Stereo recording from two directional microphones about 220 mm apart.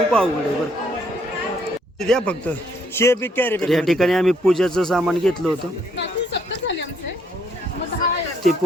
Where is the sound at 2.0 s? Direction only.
5° left (ahead or behind).